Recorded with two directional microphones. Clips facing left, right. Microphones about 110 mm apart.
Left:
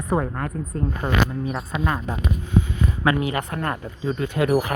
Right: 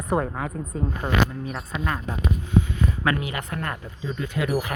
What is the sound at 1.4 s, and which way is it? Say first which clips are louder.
Speech: left 4 dB; 20° left (ahead or behind).